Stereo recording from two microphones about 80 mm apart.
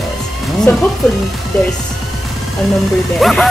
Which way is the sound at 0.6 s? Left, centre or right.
Centre.